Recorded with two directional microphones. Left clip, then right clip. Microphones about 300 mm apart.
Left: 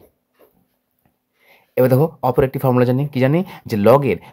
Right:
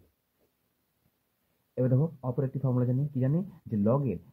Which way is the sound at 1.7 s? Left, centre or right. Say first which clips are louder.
Left 16 dB; left.